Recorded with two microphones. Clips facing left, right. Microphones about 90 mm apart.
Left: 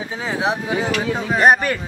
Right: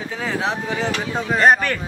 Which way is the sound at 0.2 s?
15° left (ahead or behind).